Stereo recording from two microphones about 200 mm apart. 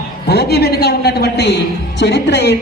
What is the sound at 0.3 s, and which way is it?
A woman's voice, 50° left (ahead or behind).